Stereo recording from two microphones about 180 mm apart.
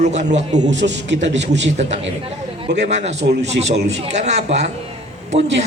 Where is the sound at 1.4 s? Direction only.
75° right (ahead or behind).